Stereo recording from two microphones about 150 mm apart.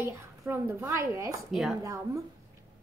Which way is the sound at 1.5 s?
Centre (ahead or behind).